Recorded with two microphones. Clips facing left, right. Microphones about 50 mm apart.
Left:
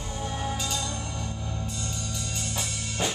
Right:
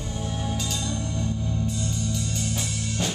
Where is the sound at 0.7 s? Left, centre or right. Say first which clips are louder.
Right 2 dB; centre.